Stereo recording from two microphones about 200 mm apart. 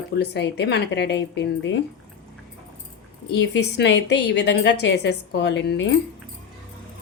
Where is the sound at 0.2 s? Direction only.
55° left (ahead or behind).